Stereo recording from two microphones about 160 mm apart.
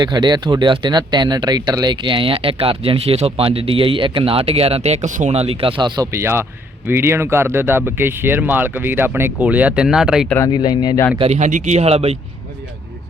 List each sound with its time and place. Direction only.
0.0 s speech: 25° right (ahead or behind); by 10.2 s 5° right (ahead or behind)
10.2 s speech: 15° left (ahead or behind)
10.5 s speech: 30° left (ahead or behind)
11.2 s speech: 45° right (ahead or behind)